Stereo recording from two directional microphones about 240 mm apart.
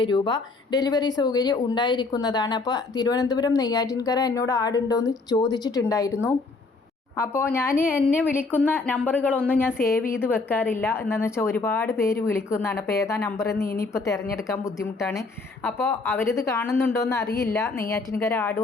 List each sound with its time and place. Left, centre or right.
0.0 s speech: centre
7.2 s speech: centre